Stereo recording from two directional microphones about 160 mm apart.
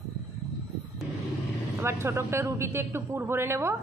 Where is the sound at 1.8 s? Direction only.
15° right (ahead or behind).